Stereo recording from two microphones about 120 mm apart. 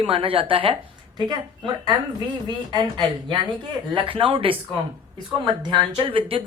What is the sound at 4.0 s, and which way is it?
Speech, 45° right (ahead or behind).